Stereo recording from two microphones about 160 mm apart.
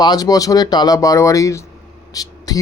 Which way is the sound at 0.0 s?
25° left (ahead or behind).